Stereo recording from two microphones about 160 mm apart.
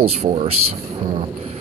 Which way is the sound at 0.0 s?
40° right (ahead or behind).